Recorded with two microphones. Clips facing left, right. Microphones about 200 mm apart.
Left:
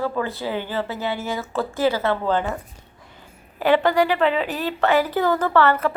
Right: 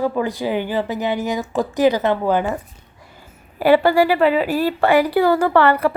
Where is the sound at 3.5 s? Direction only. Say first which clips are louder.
Right 4 dB; 10° right (ahead or behind).